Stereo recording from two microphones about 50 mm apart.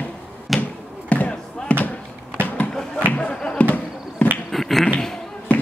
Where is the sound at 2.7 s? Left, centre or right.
Centre.